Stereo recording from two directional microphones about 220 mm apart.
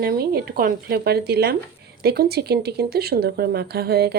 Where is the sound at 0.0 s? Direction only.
45° right (ahead or behind).